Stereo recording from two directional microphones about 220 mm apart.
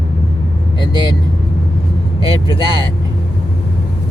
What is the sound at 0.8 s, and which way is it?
Speech, 20° left (ahead or behind).